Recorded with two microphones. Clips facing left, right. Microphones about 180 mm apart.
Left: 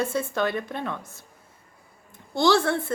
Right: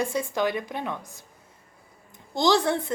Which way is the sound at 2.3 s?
20° right (ahead or behind).